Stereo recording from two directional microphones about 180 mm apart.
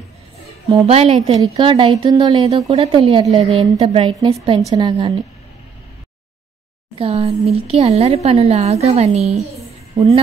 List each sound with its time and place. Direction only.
0.7 s a woman's voice: 30° right (ahead or behind)
1.4 s a woman's voice: 20° right (ahead or behind)
7.0 s a woman's voice: 35° right (ahead or behind)